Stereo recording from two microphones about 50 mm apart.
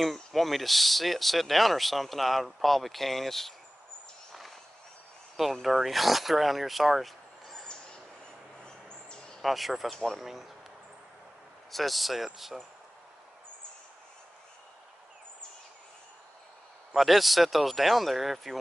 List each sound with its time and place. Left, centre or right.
0.0 s speech: centre
4.3 s a sound: centre
5.4 s speech: centre
8.6 s a sound: centre
9.4 s speech: centre
10.2 s speech: centre
11.7 s speech: centre
16.9 s speech: centre